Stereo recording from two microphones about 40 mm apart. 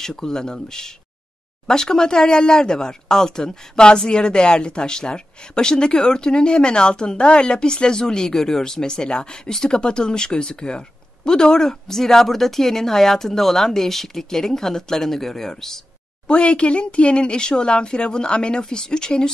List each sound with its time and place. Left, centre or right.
0.0 s speech: centre
16.3 s speech: left